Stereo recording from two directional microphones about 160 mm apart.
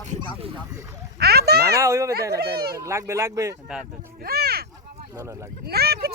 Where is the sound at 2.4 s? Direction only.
85° right.